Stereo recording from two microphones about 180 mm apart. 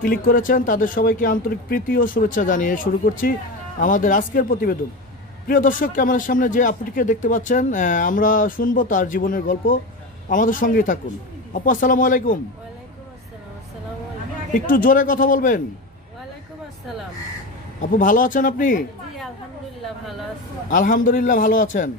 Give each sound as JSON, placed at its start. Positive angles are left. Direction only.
{"t": 0.0, "sound": "speech", "side_deg": 50}
{"t": 14.7, "sound": "speech", "side_deg": 50}
{"t": 17.7, "sound": "speech", "side_deg": 45}
{"t": 20.7, "sound": "speech", "side_deg": 50}